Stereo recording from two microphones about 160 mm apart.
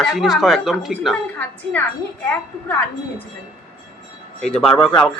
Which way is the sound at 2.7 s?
10° left (ahead or behind).